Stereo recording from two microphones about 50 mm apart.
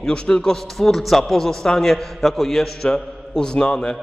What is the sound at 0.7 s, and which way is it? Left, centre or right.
A man's voice, centre.